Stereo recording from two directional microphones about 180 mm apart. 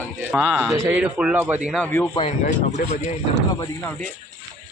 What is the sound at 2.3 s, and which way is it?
Speech, 40° left (ahead or behind).